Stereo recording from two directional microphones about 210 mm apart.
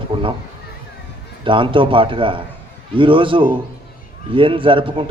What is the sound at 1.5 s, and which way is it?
A man's voice, 25° right (ahead or behind).